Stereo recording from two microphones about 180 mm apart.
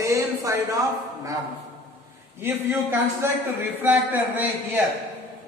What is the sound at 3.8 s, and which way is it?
A man's voice, 10° right (ahead or behind).